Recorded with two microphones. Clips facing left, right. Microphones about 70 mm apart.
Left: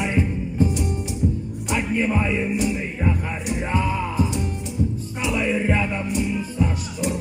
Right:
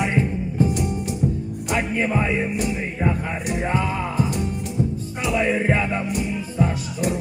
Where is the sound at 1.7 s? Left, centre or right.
Right.